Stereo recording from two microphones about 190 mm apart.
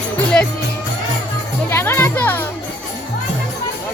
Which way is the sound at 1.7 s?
10° left (ahead or behind).